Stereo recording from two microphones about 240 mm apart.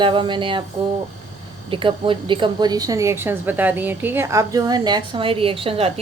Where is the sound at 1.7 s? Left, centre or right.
Right.